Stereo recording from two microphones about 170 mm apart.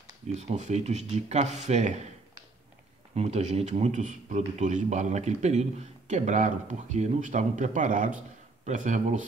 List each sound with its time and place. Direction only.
0.3 s a man's voice: 40° right (ahead or behind)
3.2 s a man's voice: 40° right (ahead or behind)